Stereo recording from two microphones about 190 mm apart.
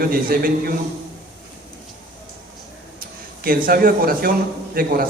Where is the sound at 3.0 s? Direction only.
50° right (ahead or behind).